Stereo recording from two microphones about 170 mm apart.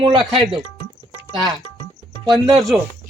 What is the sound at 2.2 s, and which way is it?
Speech, centre (ahead or behind).